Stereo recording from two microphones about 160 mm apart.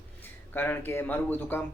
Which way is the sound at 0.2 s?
15° left (ahead or behind).